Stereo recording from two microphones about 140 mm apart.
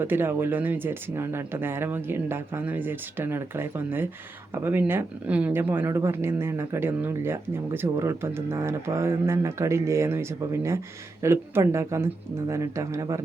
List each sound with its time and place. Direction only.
0.0 s speech: 15° right (ahead or behind)